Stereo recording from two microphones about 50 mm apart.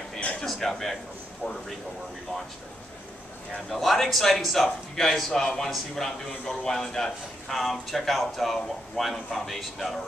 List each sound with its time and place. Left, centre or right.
0.4 s a man's voice: centre
1.4 s a man's voice: left
3.7 s a man's voice: centre